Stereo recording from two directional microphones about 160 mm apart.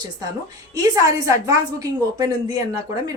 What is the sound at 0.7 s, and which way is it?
Speech, 20° right (ahead or behind).